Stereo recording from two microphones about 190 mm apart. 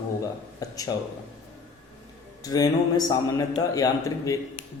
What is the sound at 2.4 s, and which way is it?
A man's voice, 20° left (ahead or behind).